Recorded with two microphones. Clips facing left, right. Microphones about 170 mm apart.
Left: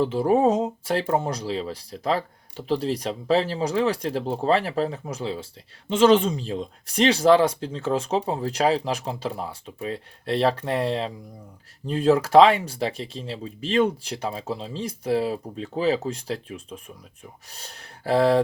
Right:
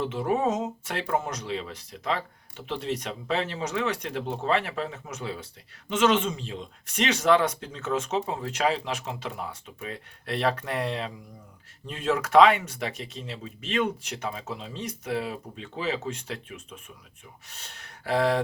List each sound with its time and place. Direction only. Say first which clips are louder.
0.0 s speech: left 6 dB; 35° left (ahead or behind)